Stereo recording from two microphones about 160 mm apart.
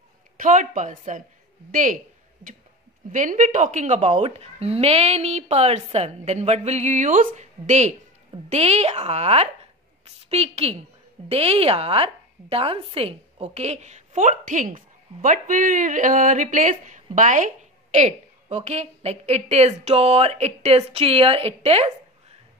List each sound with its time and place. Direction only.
0.4 s speech: 55° right (ahead or behind)
3.1 s a woman's voice: 55° right (ahead or behind)